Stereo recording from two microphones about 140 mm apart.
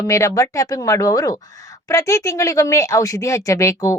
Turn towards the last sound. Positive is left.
turn(degrees=20)  # may be behind; listen again after turning